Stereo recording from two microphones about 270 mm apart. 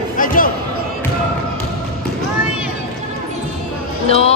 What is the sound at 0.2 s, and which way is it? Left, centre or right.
Basketball bounce, left.